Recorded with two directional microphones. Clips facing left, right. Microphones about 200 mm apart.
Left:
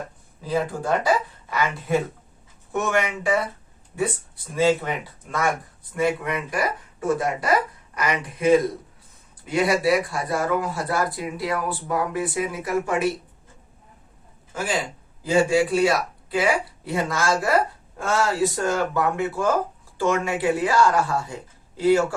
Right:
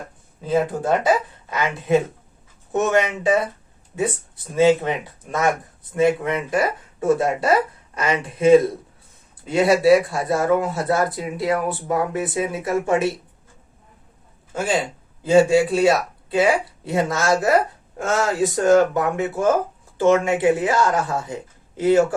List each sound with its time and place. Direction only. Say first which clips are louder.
0.4 s speech: right 4 dB; 25° right (ahead or behind)
4.5 s speech: right 4 dB; 20° right (ahead or behind)
14.5 s a man's voice: right 4 dB; 25° right (ahead or behind)